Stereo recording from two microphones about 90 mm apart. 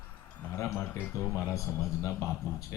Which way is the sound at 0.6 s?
30° left (ahead or behind).